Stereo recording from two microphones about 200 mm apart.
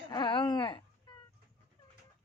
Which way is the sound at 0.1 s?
25° left (ahead or behind).